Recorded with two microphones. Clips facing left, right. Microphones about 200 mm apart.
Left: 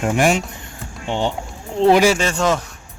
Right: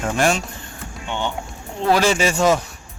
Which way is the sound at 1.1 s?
30° left (ahead or behind).